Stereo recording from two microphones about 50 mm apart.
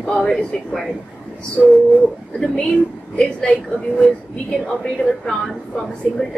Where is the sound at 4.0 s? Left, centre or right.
Centre.